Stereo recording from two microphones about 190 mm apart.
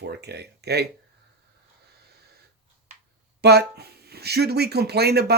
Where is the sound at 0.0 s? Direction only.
60° right (ahead or behind).